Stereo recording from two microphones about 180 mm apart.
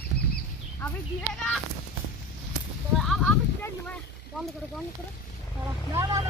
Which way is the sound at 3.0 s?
Centre (ahead or behind).